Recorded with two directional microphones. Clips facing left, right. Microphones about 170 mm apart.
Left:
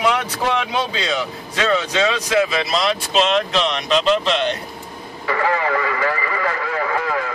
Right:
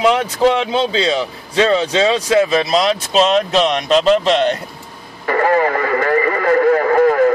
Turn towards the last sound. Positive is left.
turn(degrees=-45)  # may be behind; listen again after turning